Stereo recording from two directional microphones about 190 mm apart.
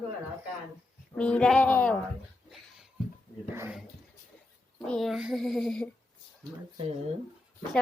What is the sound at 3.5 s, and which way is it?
Speech, 10° right (ahead or behind).